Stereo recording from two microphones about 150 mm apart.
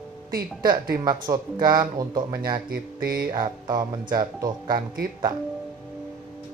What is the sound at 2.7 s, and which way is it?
Speech, 80° right.